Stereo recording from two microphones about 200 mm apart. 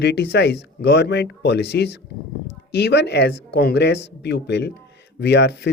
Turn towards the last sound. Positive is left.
turn(degrees=60)  # may be behind; listen again after turning